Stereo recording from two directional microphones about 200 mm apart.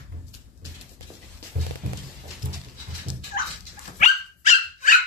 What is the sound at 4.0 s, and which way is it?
Dog, 40° left (ahead or behind).